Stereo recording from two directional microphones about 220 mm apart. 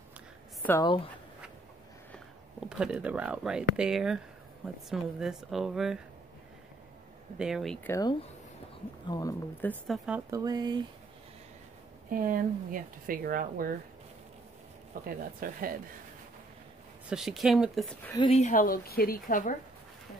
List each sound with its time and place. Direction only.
0.7 s speech: 15° left (ahead or behind)
2.8 s speech: 5° right (ahead or behind)
7.3 s speech: centre (ahead or behind)
10.0 s speech: 5° right (ahead or behind)
10.4 s speech: 20° right (ahead or behind)
12.1 s speech: 40° right (ahead or behind)
15.0 s speech: 40° right (ahead or behind)
17.1 s speech: centre (ahead or behind)
18.2 s speech: 30° left (ahead or behind)